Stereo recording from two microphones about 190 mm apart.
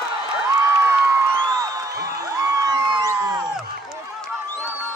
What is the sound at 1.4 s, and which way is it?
Music, 20° right (ahead or behind).